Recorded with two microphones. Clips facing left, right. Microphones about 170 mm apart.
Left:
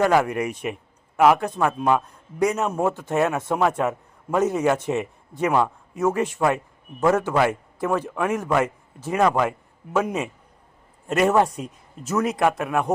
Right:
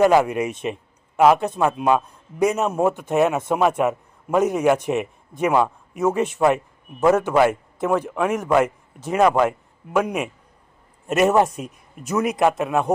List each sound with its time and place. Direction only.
0.0 s speech: 20° right (ahead or behind)
1.5 s a man's voice: 10° right (ahead or behind)